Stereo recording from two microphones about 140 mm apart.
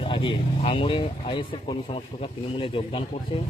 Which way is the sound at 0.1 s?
40° left (ahead or behind).